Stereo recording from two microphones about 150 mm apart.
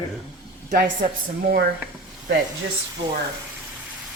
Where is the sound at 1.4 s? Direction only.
85° right.